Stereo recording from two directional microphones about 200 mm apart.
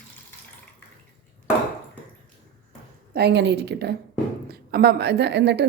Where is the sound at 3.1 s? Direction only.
55° right (ahead or behind).